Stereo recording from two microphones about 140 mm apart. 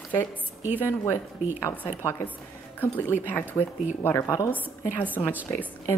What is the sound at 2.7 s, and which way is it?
A woman's voice, 15° left (ahead or behind).